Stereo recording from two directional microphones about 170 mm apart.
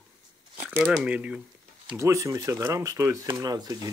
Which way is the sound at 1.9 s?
20° right (ahead or behind).